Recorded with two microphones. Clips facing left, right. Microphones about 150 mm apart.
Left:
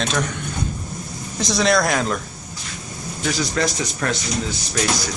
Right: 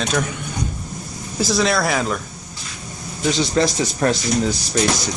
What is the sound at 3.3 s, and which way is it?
Speech, 25° right (ahead or behind).